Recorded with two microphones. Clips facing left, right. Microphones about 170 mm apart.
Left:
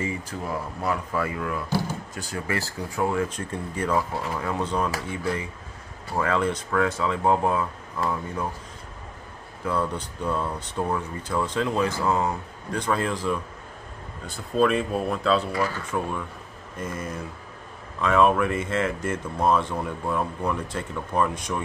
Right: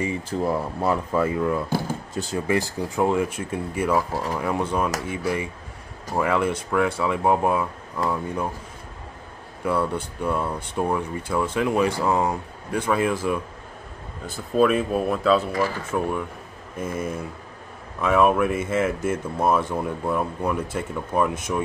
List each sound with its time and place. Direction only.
0.3 s speech: 30° right (ahead or behind)
3.3 s speech: 10° right (ahead or behind)
6.1 s speech: 10° right (ahead or behind)
9.7 s speech: 10° right (ahead or behind)
14.6 s speech: 5° right (ahead or behind)